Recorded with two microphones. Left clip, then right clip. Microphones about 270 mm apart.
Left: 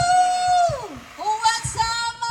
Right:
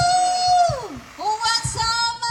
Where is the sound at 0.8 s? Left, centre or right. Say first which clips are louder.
Right 1 dB; left.